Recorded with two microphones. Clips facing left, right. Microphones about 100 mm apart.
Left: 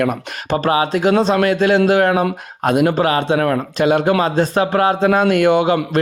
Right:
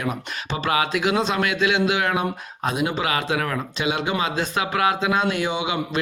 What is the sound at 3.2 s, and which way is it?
Speech, 30° left (ahead or behind).